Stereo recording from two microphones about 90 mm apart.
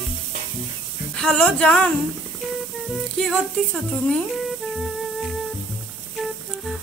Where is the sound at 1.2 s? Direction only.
10° left (ahead or behind).